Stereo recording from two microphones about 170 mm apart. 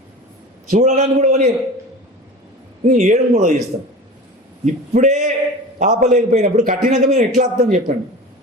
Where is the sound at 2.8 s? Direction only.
45° right (ahead or behind).